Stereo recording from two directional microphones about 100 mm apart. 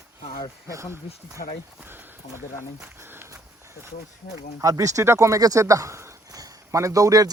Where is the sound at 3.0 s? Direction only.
20° right (ahead or behind).